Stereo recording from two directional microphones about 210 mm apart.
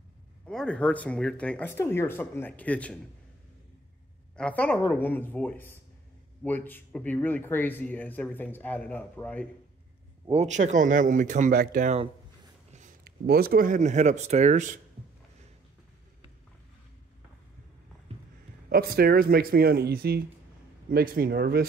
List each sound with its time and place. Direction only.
0.5 s speech: 5° left (ahead or behind)
4.4 s speech: 5° left (ahead or behind)
10.3 s speech: 35° right (ahead or behind)
18.1 s a sound: 30° right (ahead or behind)
18.7 s speech: 45° right (ahead or behind)